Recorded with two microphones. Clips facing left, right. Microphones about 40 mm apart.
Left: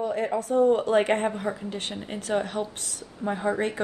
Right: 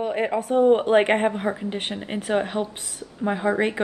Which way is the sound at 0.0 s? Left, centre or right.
Right.